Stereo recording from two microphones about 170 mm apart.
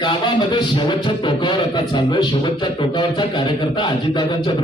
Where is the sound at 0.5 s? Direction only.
25° left (ahead or behind).